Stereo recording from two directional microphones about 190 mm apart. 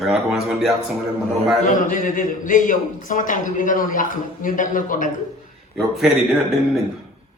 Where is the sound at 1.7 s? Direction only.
45° left (ahead or behind).